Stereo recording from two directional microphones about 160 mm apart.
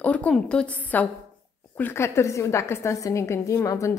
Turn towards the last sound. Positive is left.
turn(degrees=20)  # may be behind; listen again after turning